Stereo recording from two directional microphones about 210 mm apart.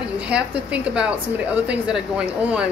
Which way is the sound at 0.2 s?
5° right (ahead or behind).